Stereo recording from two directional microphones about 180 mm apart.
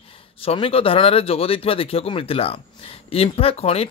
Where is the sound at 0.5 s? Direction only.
30° left (ahead or behind).